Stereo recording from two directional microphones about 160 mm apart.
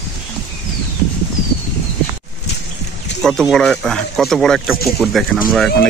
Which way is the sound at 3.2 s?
Centre (ahead or behind).